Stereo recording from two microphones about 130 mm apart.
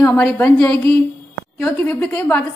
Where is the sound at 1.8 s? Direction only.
15° left (ahead or behind).